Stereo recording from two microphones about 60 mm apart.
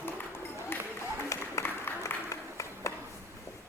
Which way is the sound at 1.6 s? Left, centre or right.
Left.